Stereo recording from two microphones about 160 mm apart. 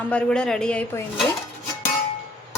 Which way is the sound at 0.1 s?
5° left (ahead or behind).